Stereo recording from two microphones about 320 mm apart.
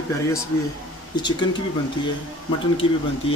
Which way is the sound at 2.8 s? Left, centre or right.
Centre.